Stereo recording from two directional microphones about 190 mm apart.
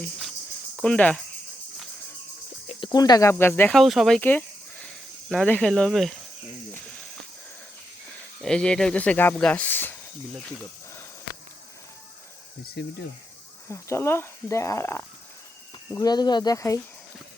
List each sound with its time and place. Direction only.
0.8 s speech: 5° left (ahead or behind)
2.6 s speech: 25° left (ahead or behind); by 6.1 s centre (ahead or behind)
8.4 s speech: 5° left (ahead or behind)
12.8 s speech: 60° left (ahead or behind)
13.7 s speech: 15° left (ahead or behind)